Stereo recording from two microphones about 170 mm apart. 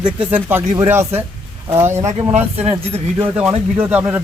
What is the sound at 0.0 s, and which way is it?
Speech, 10° right (ahead or behind).